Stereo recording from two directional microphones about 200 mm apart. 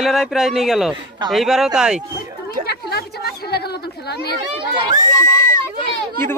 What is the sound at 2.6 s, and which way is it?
Chatter, 50° left (ahead or behind).